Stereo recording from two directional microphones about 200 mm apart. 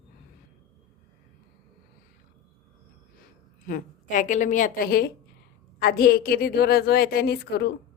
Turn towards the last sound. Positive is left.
turn(degrees=55)  # may be behind; listen again after turning